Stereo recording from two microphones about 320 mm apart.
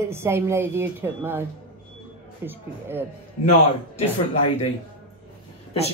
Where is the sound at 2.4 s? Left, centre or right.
Centre.